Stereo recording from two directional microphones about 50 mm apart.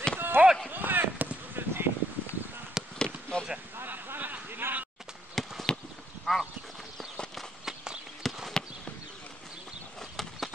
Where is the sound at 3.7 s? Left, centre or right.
Right.